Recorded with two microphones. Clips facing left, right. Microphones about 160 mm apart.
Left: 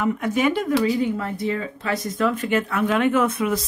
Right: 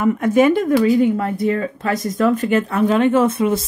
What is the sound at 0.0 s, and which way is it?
Speech, 50° right (ahead or behind).